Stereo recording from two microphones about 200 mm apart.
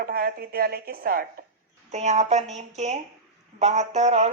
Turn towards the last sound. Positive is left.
turn(degrees=-35)  # may be behind; listen again after turning